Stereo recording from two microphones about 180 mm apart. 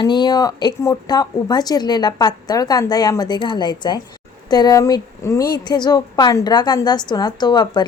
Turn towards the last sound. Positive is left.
turn(degrees=25)  # may be behind; listen again after turning